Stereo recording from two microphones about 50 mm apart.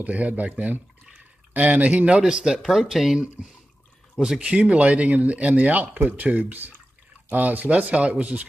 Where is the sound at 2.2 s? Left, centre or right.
Centre.